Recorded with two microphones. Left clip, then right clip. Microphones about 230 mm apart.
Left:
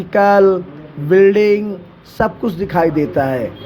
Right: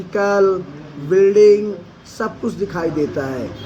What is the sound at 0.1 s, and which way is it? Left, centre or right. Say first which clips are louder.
Speech: left 5 dB; left.